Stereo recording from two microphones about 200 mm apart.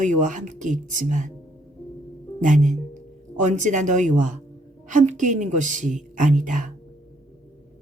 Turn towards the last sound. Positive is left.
turn(degrees=-40)  # may be behind; listen again after turning